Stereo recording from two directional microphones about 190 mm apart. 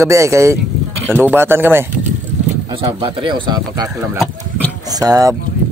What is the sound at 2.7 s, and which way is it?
Speech, 25° right (ahead or behind).